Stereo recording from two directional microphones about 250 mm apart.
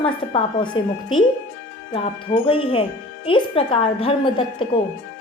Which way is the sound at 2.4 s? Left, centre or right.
Left.